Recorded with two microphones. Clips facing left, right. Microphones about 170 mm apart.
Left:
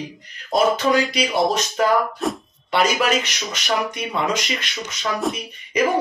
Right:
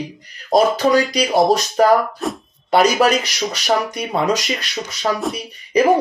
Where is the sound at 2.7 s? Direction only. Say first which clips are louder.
Right 5 dB; 40° right (ahead or behind).